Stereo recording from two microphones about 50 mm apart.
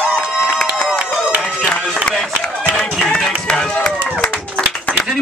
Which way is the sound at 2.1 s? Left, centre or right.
Centre.